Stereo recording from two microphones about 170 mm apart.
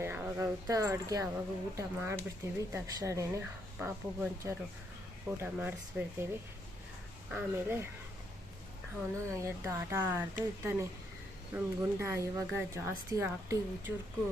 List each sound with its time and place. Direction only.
0.0 s speech: 10° right (ahead or behind)
7.3 s speech: 10° right (ahead or behind)
9.1 s speech: 15° right (ahead or behind)